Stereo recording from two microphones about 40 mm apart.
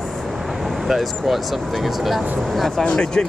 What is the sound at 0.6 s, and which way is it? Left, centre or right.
Speech, centre.